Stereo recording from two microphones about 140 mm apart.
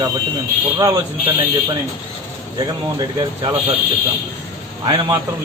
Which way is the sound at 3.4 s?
40° right (ahead or behind).